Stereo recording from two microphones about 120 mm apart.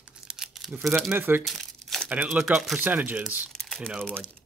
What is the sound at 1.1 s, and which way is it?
Speech, 15° right (ahead or behind).